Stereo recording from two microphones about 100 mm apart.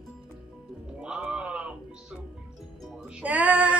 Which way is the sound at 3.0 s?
15° right (ahead or behind).